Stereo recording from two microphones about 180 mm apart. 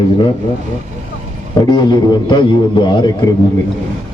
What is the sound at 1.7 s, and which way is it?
A man's voice, 25° left (ahead or behind).